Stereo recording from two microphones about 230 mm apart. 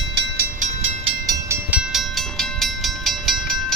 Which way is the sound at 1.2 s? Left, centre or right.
Centre.